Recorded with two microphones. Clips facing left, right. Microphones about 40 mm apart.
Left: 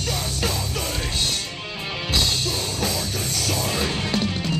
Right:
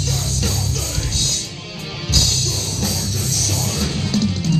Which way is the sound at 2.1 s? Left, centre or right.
Centre.